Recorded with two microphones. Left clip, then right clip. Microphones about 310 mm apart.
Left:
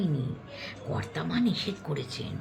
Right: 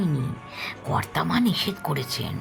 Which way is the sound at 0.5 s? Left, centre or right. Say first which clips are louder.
Right 9 dB; right.